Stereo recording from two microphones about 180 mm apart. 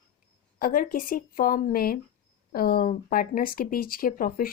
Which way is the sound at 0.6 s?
50° left (ahead or behind).